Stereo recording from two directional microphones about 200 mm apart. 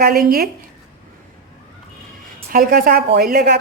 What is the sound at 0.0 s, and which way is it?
Speech, 50° right (ahead or behind).